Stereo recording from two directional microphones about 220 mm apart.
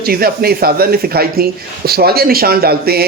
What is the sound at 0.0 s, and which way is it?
Speech, 45° right (ahead or behind).